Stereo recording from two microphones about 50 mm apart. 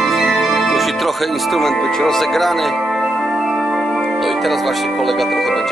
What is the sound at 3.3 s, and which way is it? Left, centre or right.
Music, centre.